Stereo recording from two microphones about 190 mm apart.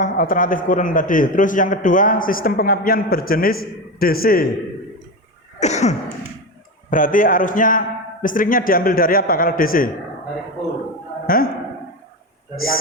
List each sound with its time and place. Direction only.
0.0 s a man's voice: 45° left (ahead or behind)
5.5 s cough: 35° left (ahead or behind)
6.9 s a man's voice: 45° left (ahead or behind)
11.3 s a man's voice: 50° left (ahead or behind)
12.5 s a man's voice: 50° left (ahead or behind)